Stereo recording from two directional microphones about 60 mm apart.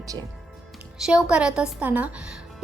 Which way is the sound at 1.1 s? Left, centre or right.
Centre.